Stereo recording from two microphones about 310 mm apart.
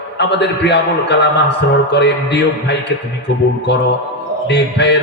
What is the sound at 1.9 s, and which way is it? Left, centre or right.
Speech, left.